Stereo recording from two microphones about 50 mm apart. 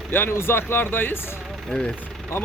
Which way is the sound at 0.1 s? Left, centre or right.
Left.